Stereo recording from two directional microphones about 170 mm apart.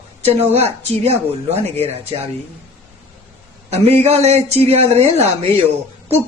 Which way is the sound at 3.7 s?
40° right (ahead or behind).